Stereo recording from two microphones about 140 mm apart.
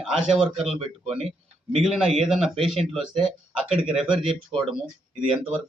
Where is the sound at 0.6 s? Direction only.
45° right (ahead or behind).